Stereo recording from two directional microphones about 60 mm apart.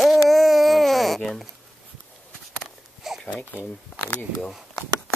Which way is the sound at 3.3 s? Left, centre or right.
Left.